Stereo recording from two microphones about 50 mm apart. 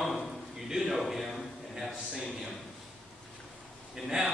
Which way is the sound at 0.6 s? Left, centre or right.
Centre.